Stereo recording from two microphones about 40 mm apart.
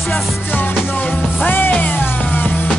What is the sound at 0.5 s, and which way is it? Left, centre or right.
Music, left.